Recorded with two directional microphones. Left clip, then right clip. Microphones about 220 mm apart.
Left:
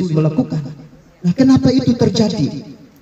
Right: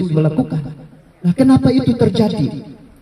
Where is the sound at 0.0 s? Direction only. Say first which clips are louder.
Even; 50° right (ahead or behind).